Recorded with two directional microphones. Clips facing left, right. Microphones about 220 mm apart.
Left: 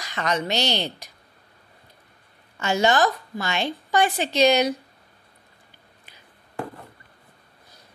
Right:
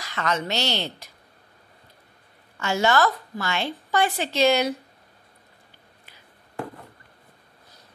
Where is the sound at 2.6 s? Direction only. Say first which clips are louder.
Left 1 dB; 20° left (ahead or behind).